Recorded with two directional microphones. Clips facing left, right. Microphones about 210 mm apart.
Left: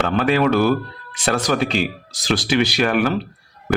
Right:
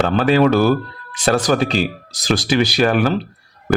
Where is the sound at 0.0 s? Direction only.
35° right (ahead or behind).